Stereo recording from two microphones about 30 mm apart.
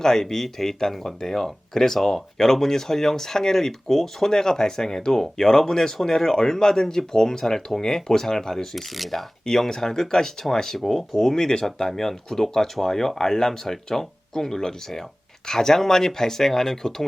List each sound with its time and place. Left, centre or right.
0.0 s speech: centre
8.7 s speech: centre
9.5 s speech: centre